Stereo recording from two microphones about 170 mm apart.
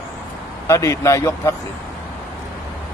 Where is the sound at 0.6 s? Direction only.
20° left (ahead or behind).